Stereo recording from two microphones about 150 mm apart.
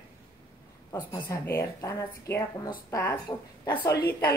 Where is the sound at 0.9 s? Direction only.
30° left (ahead or behind).